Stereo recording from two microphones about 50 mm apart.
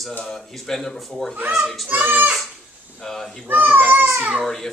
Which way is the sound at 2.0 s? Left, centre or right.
Right.